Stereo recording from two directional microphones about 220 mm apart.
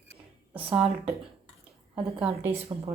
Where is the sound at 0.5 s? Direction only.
5° right (ahead or behind).